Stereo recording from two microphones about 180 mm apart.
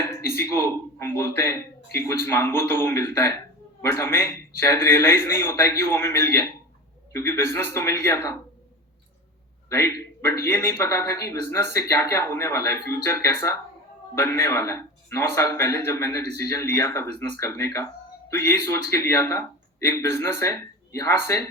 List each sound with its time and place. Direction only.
0.0 s a man's voice: 15° left (ahead or behind)
9.6 s a man's voice: 15° left (ahead or behind)